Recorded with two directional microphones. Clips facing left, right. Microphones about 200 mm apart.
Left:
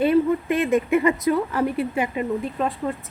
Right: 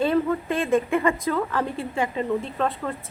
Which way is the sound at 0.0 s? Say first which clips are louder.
Left 3 dB; 15° left (ahead or behind).